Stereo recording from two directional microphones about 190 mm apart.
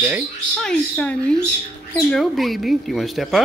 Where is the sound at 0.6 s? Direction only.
5° left (ahead or behind).